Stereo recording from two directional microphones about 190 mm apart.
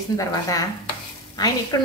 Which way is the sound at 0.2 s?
20° left (ahead or behind).